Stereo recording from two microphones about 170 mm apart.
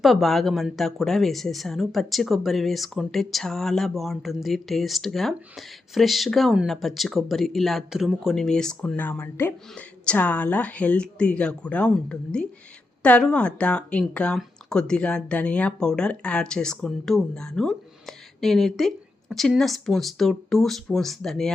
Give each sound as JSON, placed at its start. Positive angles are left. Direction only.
{"t": 0.0, "sound": "speech", "side_deg": 0}